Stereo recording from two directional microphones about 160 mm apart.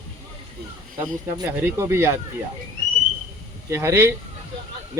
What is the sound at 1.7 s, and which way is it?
Speech, 15° right (ahead or behind).